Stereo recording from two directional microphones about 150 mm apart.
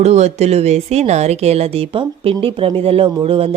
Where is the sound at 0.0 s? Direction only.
50° right (ahead or behind).